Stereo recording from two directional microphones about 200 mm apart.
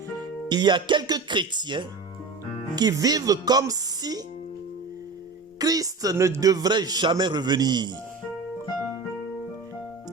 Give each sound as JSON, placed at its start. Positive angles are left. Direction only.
{"t": 0.2, "sound": "a man's voice", "side_deg": -20}
{"t": 5.5, "sound": "a man's voice", "side_deg": -20}